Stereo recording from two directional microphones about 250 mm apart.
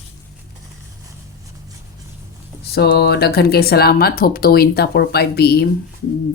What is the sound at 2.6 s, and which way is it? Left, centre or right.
A woman's voice, left.